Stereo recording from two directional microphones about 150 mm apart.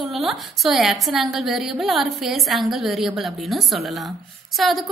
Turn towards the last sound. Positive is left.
turn(degrees=0)  # may be behind; listen again after turning